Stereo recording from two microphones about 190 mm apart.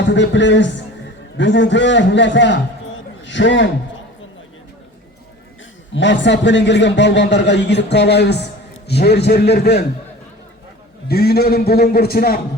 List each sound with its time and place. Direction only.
0.0 s a man's voice: 70° left (ahead or behind)
5.9 s a man's voice: 70° left (ahead or behind)
11.1 s a man's voice: 55° left (ahead or behind)